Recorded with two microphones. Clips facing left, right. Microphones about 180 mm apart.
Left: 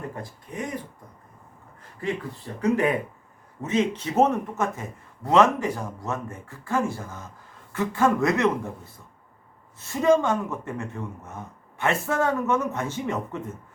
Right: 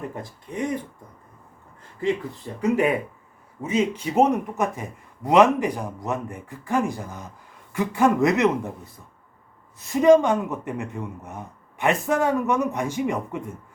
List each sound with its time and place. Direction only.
2.0 s a man's voice: 20° right (ahead or behind)
9.7 s a man's voice: 15° right (ahead or behind)